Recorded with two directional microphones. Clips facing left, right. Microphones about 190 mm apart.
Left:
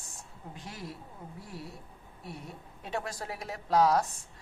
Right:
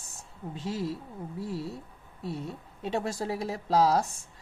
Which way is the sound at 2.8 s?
25° right (ahead or behind).